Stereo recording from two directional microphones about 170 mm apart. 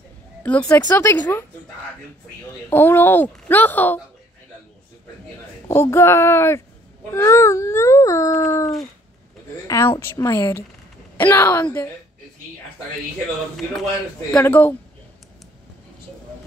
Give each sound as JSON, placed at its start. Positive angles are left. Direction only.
{"t": 0.4, "sound": "speech", "side_deg": 5}
{"t": 2.7, "sound": "speech", "side_deg": 10}
{"t": 5.7, "sound": "speech", "side_deg": 15}
{"t": 14.3, "sound": "speech", "side_deg": 10}